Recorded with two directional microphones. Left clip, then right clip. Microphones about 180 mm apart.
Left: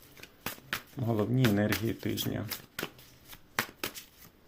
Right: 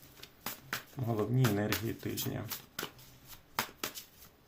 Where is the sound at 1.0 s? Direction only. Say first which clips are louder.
Left 4 dB; 30° left (ahead or behind).